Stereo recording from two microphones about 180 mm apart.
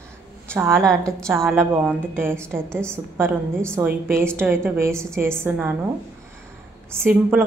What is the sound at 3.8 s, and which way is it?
A woman's voice, 15° right (ahead or behind).